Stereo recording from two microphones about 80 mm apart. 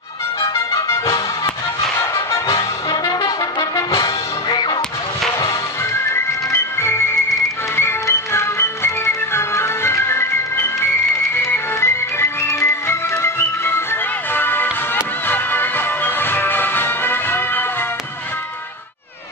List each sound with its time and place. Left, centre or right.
0.4 s music: left
2.5 s music: left
4.5 s music: left
6.0 s music: left